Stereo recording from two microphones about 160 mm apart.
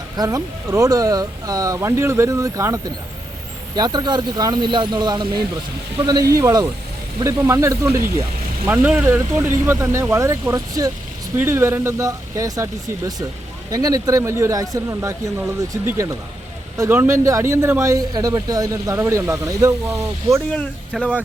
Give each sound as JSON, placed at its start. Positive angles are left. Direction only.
{"t": 0.2, "sound": "speech", "side_deg": -25}
{"t": 13.7, "sound": "speech", "side_deg": -25}
{"t": 20.9, "sound": "speech", "side_deg": 0}